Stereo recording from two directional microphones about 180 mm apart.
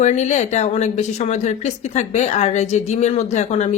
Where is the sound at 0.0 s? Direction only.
40° left (ahead or behind).